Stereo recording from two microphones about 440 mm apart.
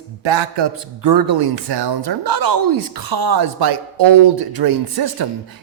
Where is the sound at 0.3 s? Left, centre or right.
Right.